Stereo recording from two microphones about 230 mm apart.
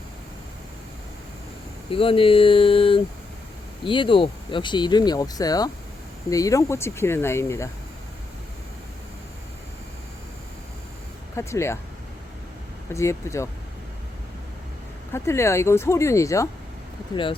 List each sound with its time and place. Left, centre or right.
1.9 s speech: left
11.3 s speech: centre
12.9 s speech: centre
15.1 s speech: centre